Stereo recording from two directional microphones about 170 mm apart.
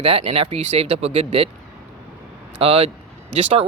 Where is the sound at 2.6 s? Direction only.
35° right (ahead or behind).